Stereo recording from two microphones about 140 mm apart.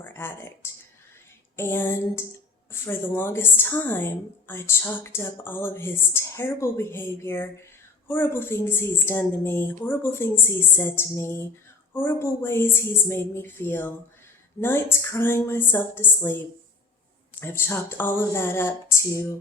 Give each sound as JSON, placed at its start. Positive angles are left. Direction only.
{"t": 0.0, "sound": "a woman's voice", "side_deg": 15}
{"t": 17.4, "sound": "a woman's voice", "side_deg": 15}